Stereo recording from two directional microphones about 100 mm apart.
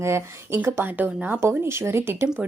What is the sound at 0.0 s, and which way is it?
A woman's voice, 25° right (ahead or behind).